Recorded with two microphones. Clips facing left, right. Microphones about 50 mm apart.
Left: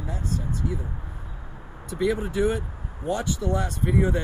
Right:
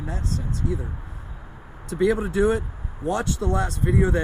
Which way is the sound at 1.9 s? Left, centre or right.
Right.